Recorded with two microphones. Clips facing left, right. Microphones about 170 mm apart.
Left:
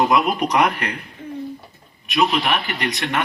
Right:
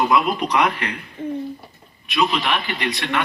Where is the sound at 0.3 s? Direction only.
45° left (ahead or behind).